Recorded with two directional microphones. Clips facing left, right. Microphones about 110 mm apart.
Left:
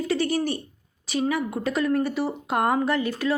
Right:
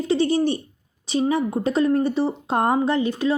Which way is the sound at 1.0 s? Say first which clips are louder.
Right 4 dB; 25° right (ahead or behind).